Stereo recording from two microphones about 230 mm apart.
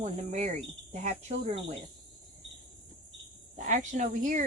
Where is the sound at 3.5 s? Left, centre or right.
Right.